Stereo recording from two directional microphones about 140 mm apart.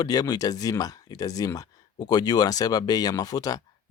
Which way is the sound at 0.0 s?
30° left (ahead or behind).